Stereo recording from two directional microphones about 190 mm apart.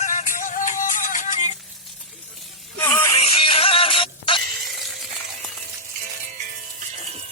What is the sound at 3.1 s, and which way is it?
Music, 30° left (ahead or behind).